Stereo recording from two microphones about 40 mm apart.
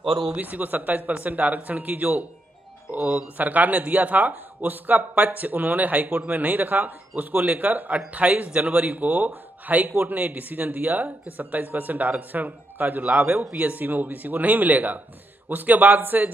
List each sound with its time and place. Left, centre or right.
0.4 s speech: right
2.9 s speech: right
3.4 s speech: right
8.2 s speech: right
8.6 s speech: right